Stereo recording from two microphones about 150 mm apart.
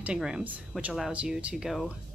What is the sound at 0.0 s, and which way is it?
Speech, 5° right (ahead or behind).